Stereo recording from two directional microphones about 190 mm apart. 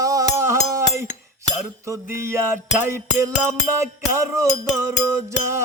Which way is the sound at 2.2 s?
15° right (ahead or behind).